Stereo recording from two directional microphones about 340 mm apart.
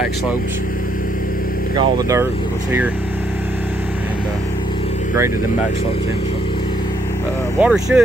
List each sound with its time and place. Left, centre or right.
1.8 s speech: centre
7.6 s speech: centre